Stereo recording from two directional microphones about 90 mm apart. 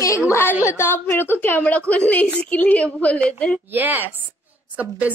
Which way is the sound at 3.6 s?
20° right (ahead or behind).